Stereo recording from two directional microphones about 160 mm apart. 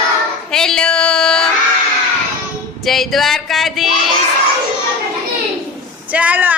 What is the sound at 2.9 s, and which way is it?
Music, centre (ahead or behind).